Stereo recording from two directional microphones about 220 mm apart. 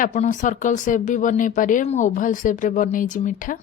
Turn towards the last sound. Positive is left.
turn(degrees=35)  # may be behind; listen again after turning